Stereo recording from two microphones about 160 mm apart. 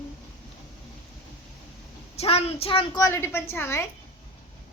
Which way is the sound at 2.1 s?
40° left (ahead or behind).